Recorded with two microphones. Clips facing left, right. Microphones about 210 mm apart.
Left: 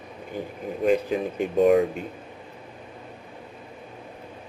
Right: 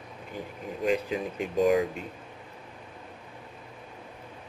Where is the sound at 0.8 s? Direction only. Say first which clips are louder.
Left 5 dB; 50° left (ahead or behind).